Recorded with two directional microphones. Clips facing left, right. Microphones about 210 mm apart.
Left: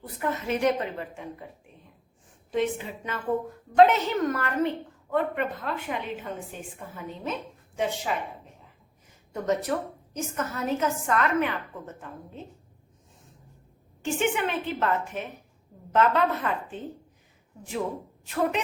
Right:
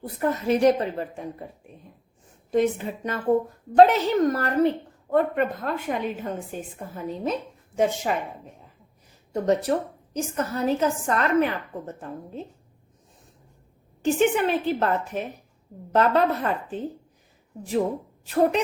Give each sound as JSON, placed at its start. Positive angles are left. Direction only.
{"t": 0.2, "sound": "a woman's voice", "side_deg": -35}
{"t": 2.5, "sound": "a woman's voice", "side_deg": -45}
{"t": 9.3, "sound": "a woman's voice", "side_deg": -35}
{"t": 14.0, "sound": "a woman's voice", "side_deg": -35}